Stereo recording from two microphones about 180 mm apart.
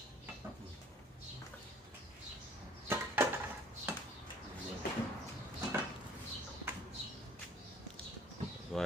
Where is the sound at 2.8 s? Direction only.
10° right (ahead or behind).